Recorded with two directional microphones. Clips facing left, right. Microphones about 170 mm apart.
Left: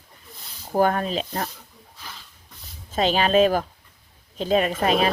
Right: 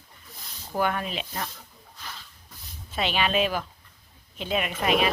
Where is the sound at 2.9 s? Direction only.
40° left (ahead or behind).